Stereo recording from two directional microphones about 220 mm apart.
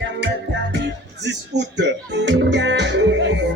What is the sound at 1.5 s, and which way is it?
Speech, 50° right (ahead or behind).